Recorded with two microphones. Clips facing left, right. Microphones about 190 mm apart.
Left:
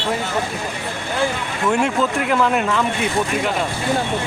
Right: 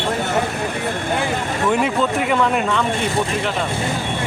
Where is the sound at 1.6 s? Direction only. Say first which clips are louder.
Even; centre (ahead or behind).